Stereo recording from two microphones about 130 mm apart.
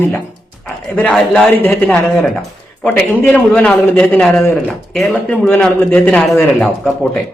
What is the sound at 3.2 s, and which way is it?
A man's voice, 10° left (ahead or behind).